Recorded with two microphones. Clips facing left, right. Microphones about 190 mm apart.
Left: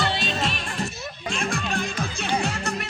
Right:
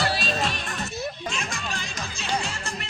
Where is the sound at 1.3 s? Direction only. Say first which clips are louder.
Left 6 dB; 55° left (ahead or behind).